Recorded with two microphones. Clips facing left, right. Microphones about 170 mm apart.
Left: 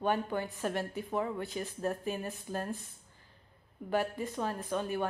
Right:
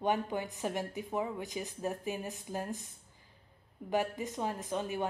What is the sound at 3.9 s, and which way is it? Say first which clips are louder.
A woman's voice: left 1 dB; 15° right (ahead or behind).